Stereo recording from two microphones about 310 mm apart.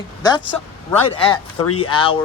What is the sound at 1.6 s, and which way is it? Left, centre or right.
Speech, left.